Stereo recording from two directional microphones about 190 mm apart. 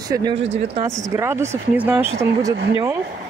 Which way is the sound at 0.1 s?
20° right (ahead or behind).